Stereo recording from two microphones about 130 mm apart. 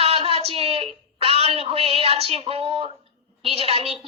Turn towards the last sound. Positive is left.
turn(degrees=-45)  # may be behind; listen again after turning